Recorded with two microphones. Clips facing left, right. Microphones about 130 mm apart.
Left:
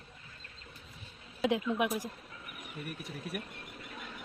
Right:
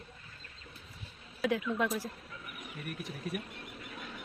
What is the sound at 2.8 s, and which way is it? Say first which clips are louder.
Speech: right 2 dB; centre (ahead or behind).